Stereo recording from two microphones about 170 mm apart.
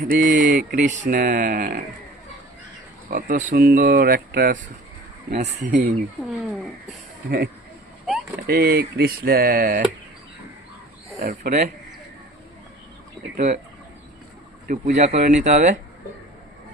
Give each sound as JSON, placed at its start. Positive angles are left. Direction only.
{"t": 0.1, "sound": "speech", "side_deg": -50}
{"t": 0.3, "sound": "speech", "side_deg": -70}
{"t": 3.1, "sound": "speech", "side_deg": -50}
{"t": 5.4, "sound": "speech", "side_deg": -50}
{"t": 7.3, "sound": "speech", "side_deg": -65}
{"t": 8.0, "sound": "a sound", "side_deg": 0}
{"t": 8.4, "sound": "speech", "side_deg": -60}
{"t": 11.2, "sound": "speech", "side_deg": -55}
{"t": 13.3, "sound": "speech", "side_deg": -45}
{"t": 14.7, "sound": "speech", "side_deg": -45}